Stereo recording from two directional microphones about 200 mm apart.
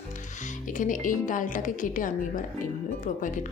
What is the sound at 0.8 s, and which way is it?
Speech, 40° left (ahead or behind).